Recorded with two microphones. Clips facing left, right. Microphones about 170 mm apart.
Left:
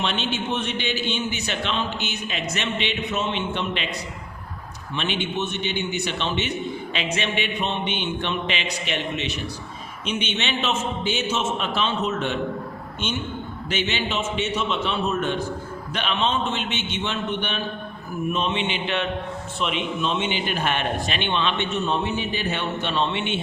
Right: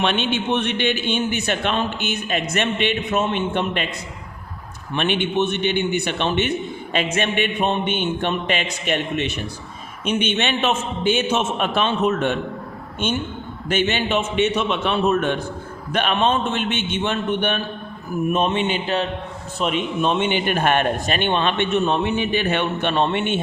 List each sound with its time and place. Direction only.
0.0 s a man's voice: 60° right (ahead or behind)
4.9 s a man's voice: 55° right (ahead or behind)
13.7 s a man's voice: 50° right (ahead or behind)